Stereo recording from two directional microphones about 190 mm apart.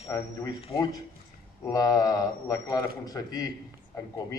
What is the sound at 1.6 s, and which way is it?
A man's voice, 20° left (ahead or behind).